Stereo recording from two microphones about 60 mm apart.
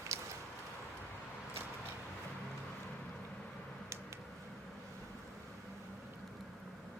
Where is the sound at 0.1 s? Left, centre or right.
Right.